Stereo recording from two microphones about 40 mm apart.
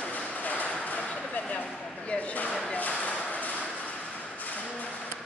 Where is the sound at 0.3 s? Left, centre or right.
Left.